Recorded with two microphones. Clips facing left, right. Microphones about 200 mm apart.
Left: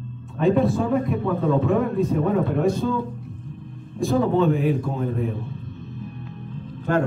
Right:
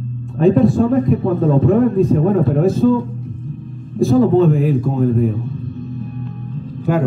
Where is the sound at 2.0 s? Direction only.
Centre (ahead or behind).